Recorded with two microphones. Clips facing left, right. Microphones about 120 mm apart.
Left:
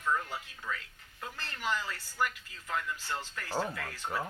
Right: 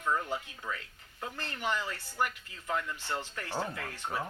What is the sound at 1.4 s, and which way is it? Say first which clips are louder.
Speech: right 1 dB; 50° right (ahead or behind).